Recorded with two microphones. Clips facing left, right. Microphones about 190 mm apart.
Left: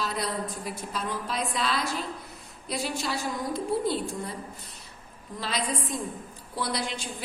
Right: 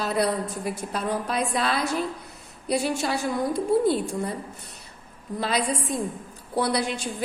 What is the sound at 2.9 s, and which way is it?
Speech, 65° right (ahead or behind).